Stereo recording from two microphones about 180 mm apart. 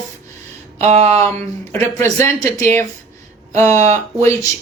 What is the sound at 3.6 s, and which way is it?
Speech, 15° left (ahead or behind).